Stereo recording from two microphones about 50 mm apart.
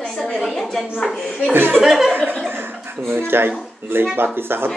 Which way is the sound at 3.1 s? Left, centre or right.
Right.